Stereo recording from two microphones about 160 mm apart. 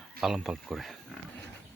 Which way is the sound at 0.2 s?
Centre (ahead or behind).